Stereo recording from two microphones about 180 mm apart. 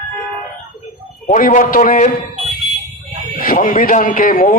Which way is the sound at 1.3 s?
45° left (ahead or behind).